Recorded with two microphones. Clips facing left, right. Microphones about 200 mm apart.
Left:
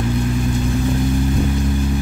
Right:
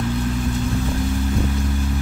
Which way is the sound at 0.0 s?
15° left (ahead or behind).